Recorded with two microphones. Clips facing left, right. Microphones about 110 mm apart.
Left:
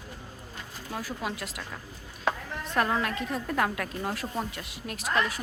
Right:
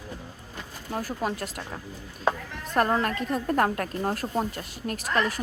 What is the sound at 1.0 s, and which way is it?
A woman's voice, 40° right (ahead or behind).